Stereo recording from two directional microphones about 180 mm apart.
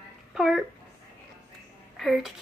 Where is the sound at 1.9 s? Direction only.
Centre (ahead or behind).